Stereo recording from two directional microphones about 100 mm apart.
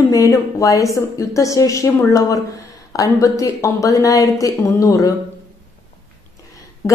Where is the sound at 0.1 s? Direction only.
35° left (ahead or behind).